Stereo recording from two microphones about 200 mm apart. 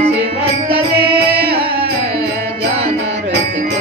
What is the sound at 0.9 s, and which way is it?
Music, 55° right (ahead or behind).